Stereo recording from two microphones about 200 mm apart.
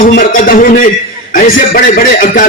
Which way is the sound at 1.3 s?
40° left (ahead or behind).